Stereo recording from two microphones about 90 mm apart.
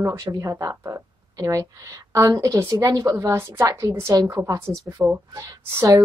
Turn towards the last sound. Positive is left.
turn(degrees=-30)  # may be behind; listen again after turning